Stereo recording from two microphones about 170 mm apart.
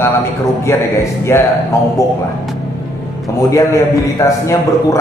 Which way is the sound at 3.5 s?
20° left (ahead or behind).